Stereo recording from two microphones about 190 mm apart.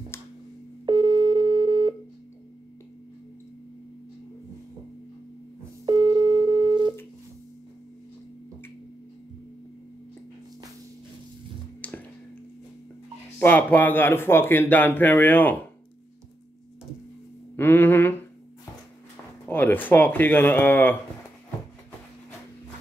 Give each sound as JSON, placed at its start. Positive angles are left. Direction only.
{"t": 0.1, "sound": "busy signal", "side_deg": 15}
{"t": 0.8, "sound": "busy signal", "side_deg": -20}
{"t": 5.9, "sound": "busy signal", "side_deg": -25}
{"t": 11.8, "sound": "a sound", "side_deg": 5}
{"t": 13.4, "sound": "speech", "side_deg": 10}
{"t": 17.6, "sound": "a sound", "side_deg": 10}
{"t": 19.4, "sound": "speech", "side_deg": 10}